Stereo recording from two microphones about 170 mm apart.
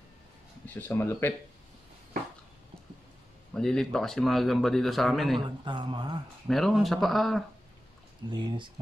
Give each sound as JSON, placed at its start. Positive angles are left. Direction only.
{"t": 0.7, "sound": "speech", "side_deg": 10}
{"t": 3.5, "sound": "speech", "side_deg": 5}
{"t": 5.7, "sound": "speech", "side_deg": -25}
{"t": 6.4, "sound": "speech", "side_deg": 0}
{"t": 8.3, "sound": "speech", "side_deg": -25}